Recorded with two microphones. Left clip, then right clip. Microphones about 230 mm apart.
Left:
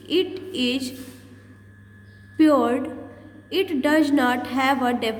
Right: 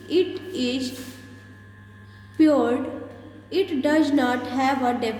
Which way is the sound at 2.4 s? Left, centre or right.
Left.